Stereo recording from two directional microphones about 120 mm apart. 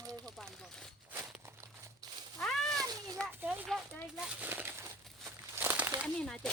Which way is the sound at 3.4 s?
15° right (ahead or behind).